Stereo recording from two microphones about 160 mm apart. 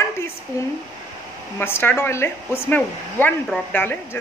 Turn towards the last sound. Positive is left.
turn(degrees=15)  # may be behind; listen again after turning